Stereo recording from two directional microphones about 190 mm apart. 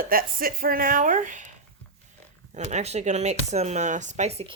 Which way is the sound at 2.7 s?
35° right (ahead or behind).